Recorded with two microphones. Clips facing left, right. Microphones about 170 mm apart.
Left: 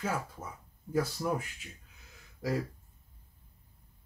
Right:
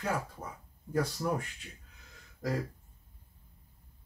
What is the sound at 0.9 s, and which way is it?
Speech, 5° left (ahead or behind).